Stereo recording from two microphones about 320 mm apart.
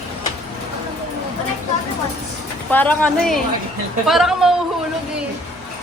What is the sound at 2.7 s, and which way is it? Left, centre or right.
A woman's voice, centre.